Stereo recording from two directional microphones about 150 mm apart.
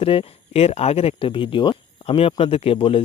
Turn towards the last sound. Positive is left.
turn(degrees=35)  # may be behind; listen again after turning